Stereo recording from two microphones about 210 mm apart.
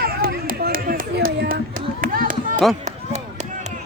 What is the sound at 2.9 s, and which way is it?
Run, 35° right (ahead or behind).